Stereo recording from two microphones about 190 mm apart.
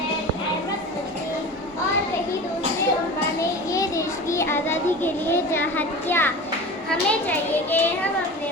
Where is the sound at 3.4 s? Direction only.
15° left (ahead or behind).